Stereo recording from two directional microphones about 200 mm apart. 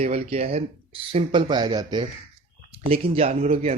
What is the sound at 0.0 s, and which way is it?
Speech, 30° right (ahead or behind).